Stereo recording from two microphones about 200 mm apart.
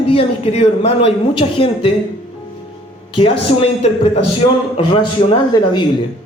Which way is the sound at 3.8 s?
30° left (ahead or behind).